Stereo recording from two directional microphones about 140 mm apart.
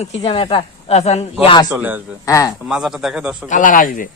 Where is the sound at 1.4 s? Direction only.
35° left (ahead or behind).